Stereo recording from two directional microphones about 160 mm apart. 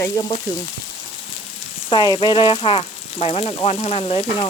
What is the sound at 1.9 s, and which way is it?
Frying, 30° left (ahead or behind).